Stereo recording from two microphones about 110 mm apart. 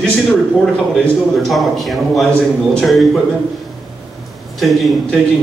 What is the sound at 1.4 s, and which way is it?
A man's voice, centre (ahead or behind).